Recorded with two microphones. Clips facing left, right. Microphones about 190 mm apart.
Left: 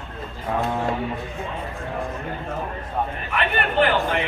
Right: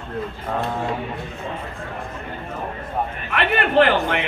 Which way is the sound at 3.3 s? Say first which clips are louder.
Right 6 dB; 75° right (ahead or behind).